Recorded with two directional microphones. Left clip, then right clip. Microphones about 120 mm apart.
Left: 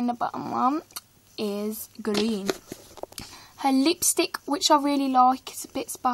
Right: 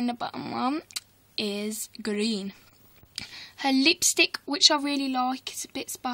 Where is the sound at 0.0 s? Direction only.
10° right (ahead or behind).